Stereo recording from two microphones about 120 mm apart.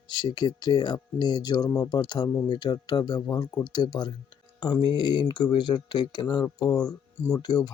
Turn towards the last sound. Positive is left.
turn(degrees=35)  # may be behind; listen again after turning